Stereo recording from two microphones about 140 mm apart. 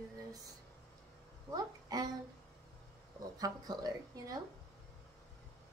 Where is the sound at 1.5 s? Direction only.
30° right (ahead or behind).